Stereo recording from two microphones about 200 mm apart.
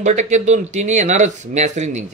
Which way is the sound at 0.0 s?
35° right (ahead or behind).